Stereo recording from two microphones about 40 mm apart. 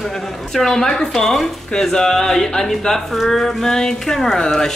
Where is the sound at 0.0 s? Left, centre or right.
Centre.